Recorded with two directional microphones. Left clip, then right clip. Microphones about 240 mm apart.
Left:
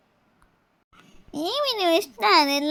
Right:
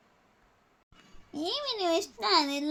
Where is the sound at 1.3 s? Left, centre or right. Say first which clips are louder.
Left 8 dB; left.